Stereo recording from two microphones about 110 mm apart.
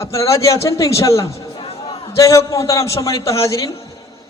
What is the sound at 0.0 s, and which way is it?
A man's voice, 25° left (ahead or behind).